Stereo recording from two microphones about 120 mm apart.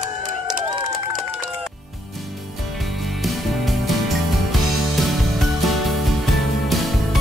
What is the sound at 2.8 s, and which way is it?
Music, centre (ahead or behind).